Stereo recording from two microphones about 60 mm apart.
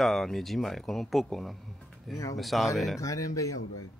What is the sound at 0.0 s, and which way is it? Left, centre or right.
Speech, centre.